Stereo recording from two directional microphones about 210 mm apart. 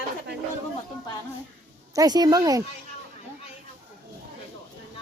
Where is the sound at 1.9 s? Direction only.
20° right (ahead or behind).